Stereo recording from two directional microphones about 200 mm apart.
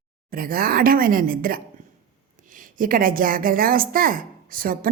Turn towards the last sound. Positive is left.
turn(degrees=-45)  # may be behind; listen again after turning